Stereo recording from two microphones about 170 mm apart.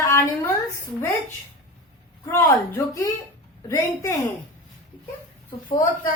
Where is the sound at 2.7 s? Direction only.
15° left (ahead or behind).